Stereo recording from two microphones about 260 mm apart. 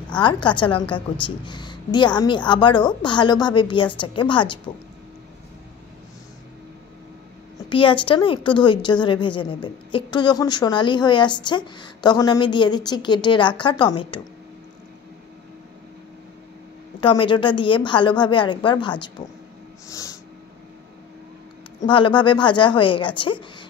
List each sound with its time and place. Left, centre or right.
0.2 s a woman's voice: centre
7.7 s a woman's voice: centre
17.0 s a woman's voice: centre
19.9 s snort: centre
21.7 s speech: centre